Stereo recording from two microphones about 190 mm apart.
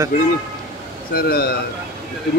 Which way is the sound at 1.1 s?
55° left (ahead or behind).